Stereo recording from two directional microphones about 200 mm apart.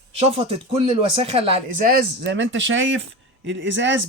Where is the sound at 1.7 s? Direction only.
45° right (ahead or behind).